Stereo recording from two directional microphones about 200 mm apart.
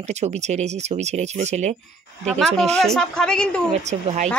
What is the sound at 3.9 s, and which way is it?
Speech, 35° right (ahead or behind).